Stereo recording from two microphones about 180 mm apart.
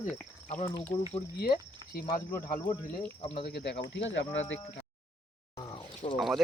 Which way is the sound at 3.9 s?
90° left.